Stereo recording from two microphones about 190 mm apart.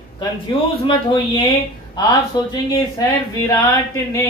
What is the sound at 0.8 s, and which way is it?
Speech, 25° left (ahead or behind).